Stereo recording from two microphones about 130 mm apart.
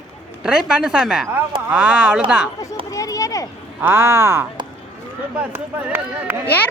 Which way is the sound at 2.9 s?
25° left (ahead or behind).